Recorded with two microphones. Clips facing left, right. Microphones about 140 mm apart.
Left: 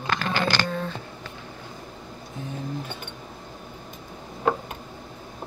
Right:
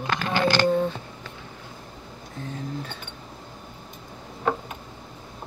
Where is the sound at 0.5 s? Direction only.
20° right (ahead or behind).